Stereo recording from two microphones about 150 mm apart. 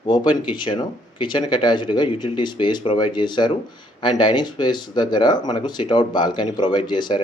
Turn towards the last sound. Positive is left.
turn(degrees=30)  # may be behind; listen again after turning